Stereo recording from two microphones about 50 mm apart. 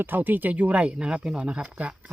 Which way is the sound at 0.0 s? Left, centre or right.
Right.